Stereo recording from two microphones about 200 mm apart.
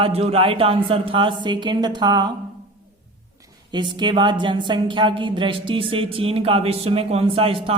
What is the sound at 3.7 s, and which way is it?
A woman's voice, 25° right (ahead or behind).